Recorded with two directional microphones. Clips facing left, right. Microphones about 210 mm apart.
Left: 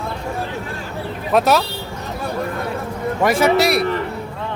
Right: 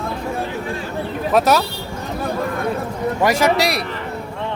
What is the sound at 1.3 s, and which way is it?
Speech, centre (ahead or behind).